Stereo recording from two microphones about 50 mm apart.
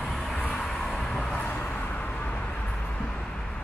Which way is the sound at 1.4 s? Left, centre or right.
Left.